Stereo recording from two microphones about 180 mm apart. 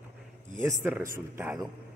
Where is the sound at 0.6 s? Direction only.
10° right (ahead or behind).